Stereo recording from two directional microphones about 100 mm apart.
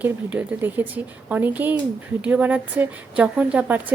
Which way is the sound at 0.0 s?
15° right (ahead or behind).